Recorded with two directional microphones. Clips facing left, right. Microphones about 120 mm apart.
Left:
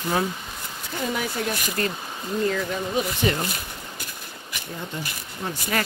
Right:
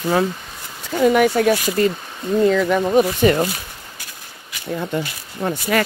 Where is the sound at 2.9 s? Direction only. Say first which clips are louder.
Right 9 dB; 55° right (ahead or behind).